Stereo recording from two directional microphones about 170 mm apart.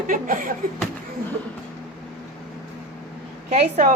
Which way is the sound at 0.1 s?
50° right (ahead or behind).